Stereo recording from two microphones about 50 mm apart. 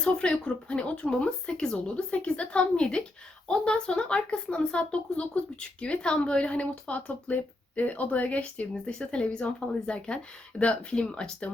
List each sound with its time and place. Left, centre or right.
0.0 s speech: left
8.7 s speech: centre